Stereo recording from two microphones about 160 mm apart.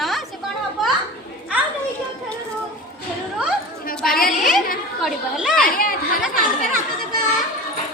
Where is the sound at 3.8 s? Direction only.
65° left (ahead or behind).